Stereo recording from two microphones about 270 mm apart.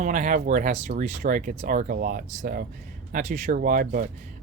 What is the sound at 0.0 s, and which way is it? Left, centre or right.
Speech, right.